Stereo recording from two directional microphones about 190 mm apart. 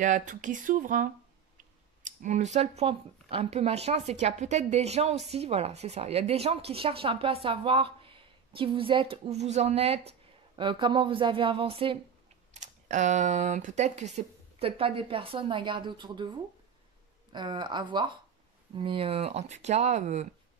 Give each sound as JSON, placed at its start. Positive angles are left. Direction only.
{"t": 0.0, "sound": "speech", "side_deg": -40}
{"t": 12.5, "sound": "speech", "side_deg": -40}